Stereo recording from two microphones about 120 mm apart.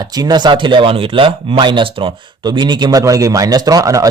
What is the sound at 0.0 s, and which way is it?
Speech, 35° right (ahead or behind).